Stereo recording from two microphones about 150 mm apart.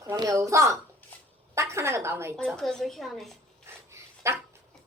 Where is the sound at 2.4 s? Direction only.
5° left (ahead or behind).